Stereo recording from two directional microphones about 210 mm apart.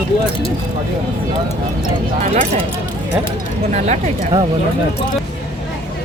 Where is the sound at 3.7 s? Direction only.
35° right (ahead or behind).